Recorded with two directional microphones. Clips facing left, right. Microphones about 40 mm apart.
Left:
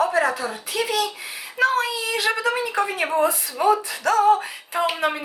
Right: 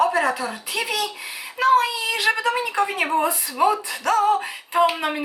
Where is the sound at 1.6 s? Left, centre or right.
Right.